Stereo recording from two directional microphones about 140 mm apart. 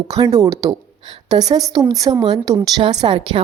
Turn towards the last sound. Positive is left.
turn(degrees=-35)  # may be behind; listen again after turning